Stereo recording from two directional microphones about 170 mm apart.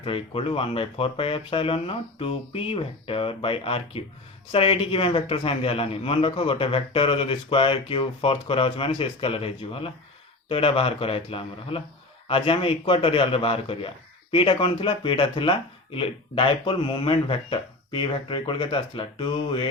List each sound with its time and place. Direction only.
0.0 s a man's voice: 35° left (ahead or behind)